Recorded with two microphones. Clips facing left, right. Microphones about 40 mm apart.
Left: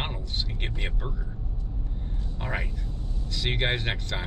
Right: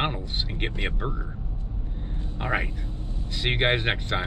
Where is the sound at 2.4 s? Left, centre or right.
Right.